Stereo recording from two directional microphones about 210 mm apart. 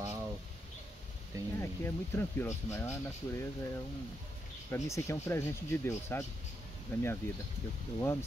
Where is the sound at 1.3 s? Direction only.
15° right (ahead or behind).